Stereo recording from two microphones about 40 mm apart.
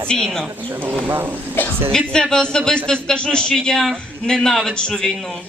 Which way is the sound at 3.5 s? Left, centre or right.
Centre.